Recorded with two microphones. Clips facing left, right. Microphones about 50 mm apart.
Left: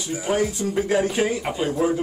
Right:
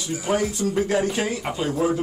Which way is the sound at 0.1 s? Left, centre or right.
Centre.